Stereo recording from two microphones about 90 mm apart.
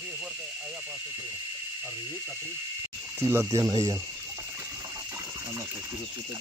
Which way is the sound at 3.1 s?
35° right (ahead or behind).